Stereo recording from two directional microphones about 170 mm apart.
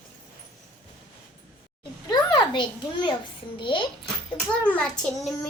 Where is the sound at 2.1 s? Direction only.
25° left (ahead or behind).